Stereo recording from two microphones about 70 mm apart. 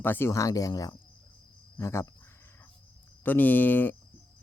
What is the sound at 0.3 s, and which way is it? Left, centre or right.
Speech, left.